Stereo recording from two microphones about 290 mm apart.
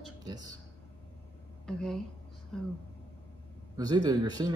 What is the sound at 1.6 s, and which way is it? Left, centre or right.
Speech, centre.